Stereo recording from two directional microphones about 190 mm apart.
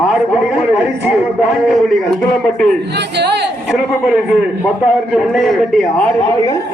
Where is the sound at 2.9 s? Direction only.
60° right (ahead or behind).